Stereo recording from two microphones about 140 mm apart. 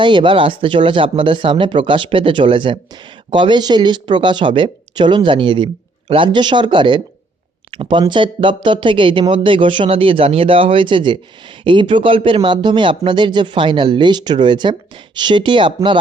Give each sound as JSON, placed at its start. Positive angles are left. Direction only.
{"t": 0.0, "sound": "speech", "side_deg": -35}